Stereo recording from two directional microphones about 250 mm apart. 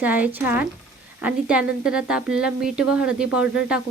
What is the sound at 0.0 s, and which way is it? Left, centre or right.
A woman's voice, centre.